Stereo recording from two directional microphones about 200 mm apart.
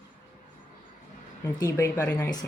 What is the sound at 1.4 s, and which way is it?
Speech, 15° left (ahead or behind).